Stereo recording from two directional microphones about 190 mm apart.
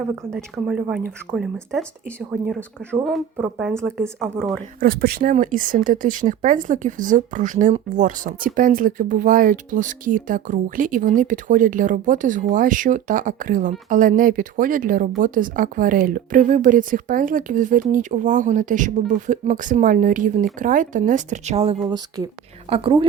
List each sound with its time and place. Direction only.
0.3 s speech: 5° right (ahead or behind)
3.0 s speech: centre (ahead or behind)
4.8 s speech: 50° right (ahead or behind); by 21.8 s 30° right (ahead or behind)
21.8 s speech: 20° right (ahead or behind)